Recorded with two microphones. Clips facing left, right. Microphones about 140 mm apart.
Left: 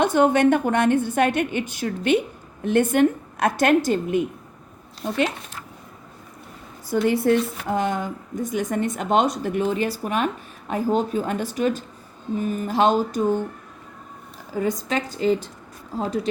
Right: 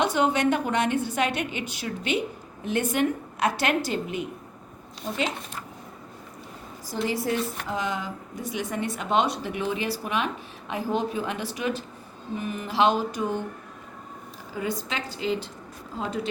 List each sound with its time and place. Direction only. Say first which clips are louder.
0.0 s speech: left 6 dB; 50° left (ahead or behind)
6.9 s speech: left 8 dB; 55° left (ahead or behind)
14.5 s speech: left 6 dB; 45° left (ahead or behind)